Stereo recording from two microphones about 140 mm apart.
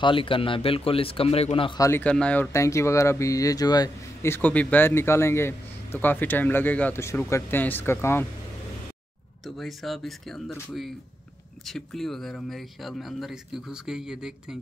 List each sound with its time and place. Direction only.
0.0 s a man's voice: 40° left (ahead or behind)
1.8 s speech: 15° left (ahead or behind)
9.6 s speech: centre (ahead or behind)